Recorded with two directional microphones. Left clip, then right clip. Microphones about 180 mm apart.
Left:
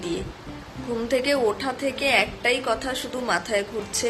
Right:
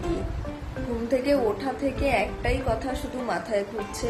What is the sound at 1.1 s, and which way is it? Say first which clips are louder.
Speech: left 1 dB; centre (ahead or behind).